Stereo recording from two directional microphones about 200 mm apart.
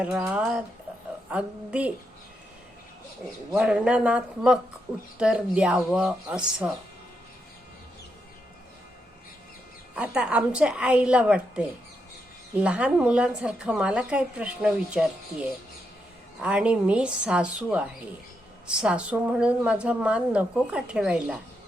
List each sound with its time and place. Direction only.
0.0 s a woman's voice: 5° right (ahead or behind)
3.5 s a woman's voice: 5° right (ahead or behind)
9.9 s a woman's voice: 5° right (ahead or behind)